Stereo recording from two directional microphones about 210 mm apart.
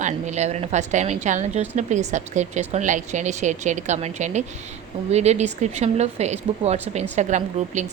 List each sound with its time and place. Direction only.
0.0 s a woman's voice: 35° right (ahead or behind)